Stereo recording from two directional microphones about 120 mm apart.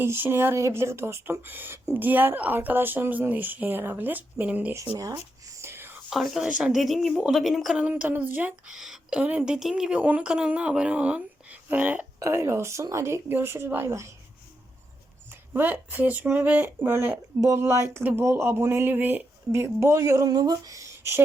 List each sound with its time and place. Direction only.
0.0 s a woman's voice: 20° right (ahead or behind)
5.5 s whispering: 20° right (ahead or behind)
6.1 s a woman's voice: centre (ahead or behind)
7.9 s a woman's voice: 15° right (ahead or behind)
15.3 s a woman's voice: 15° right (ahead or behind)